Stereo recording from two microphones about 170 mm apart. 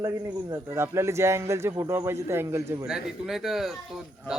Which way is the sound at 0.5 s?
15° right (ahead or behind).